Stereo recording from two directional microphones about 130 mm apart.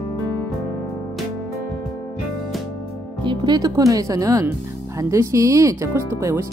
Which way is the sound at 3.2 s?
35° right (ahead or behind).